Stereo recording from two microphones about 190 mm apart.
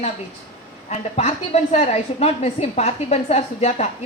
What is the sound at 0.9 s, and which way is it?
A woman's voice, 35° left (ahead or behind).